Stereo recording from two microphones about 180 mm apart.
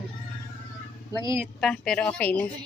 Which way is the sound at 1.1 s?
20° right (ahead or behind).